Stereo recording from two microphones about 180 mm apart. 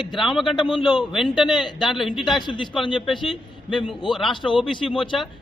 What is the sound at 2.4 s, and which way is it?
Speech, 25° left (ahead or behind).